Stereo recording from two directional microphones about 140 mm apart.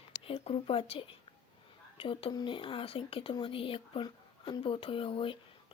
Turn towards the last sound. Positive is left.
turn(degrees=40)  # may be behind; listen again after turning